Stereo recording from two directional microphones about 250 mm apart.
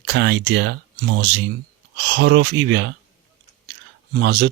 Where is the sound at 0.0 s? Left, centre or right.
Right.